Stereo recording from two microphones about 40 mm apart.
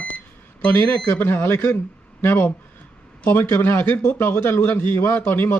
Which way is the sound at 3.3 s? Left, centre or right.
Left.